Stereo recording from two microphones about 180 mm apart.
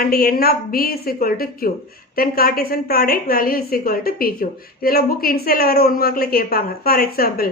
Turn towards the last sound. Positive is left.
turn(degrees=55)  # may be behind; listen again after turning